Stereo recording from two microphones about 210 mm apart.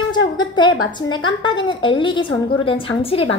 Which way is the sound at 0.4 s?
20° left (ahead or behind).